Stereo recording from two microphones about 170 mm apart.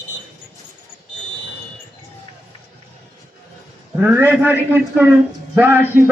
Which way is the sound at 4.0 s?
10° right (ahead or behind).